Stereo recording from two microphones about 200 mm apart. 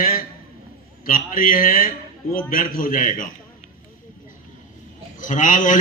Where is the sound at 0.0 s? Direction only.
45° left (ahead or behind).